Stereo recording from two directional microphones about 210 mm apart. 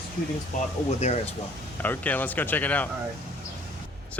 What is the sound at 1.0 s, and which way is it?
Speech, 35° left (ahead or behind).